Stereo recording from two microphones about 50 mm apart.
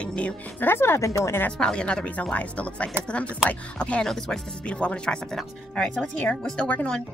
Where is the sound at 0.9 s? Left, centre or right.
Left.